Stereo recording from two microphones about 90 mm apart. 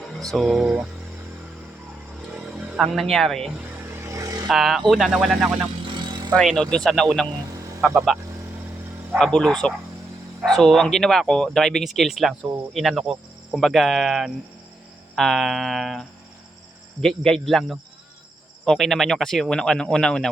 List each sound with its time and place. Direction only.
0.0 s speech: centre (ahead or behind)
2.3 s a sound: 10° right (ahead or behind)
2.9 s speech: centre (ahead or behind)
4.0 s vehicle: 35° right (ahead or behind)
4.4 s speech: centre (ahead or behind)
5.9 s vehicle: 55° right (ahead or behind)
6.4 s speech: 5° left (ahead or behind)
9.1 s speech: 5° left (ahead or behind)